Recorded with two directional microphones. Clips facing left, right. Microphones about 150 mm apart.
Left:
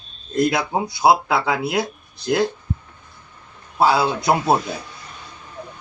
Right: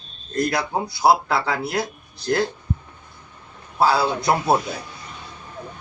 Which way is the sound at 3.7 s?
20° left (ahead or behind).